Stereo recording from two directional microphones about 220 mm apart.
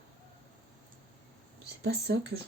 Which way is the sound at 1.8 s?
50° right (ahead or behind).